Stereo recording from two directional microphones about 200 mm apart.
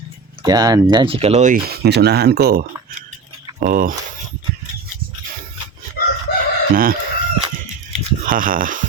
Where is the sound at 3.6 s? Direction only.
45° right (ahead or behind).